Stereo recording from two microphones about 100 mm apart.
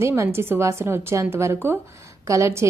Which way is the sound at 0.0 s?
30° right (ahead or behind).